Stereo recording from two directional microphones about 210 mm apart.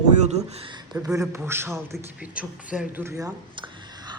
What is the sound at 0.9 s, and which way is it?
A man's voice, 5° right (ahead or behind).